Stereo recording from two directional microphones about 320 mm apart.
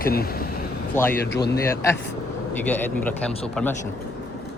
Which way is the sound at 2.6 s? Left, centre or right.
Centre.